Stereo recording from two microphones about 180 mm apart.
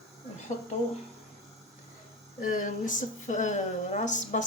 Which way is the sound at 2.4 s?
45° left (ahead or behind).